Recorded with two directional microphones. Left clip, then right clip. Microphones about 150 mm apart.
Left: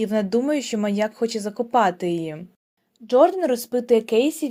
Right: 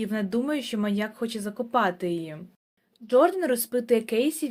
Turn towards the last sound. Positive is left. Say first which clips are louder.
# left 5 dB
turn(degrees=30)  # may be behind; listen again after turning